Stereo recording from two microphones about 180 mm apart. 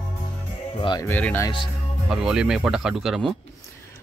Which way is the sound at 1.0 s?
10° left (ahead or behind).